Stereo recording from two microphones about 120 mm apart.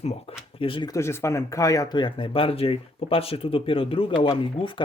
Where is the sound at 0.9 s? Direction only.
25° left (ahead or behind).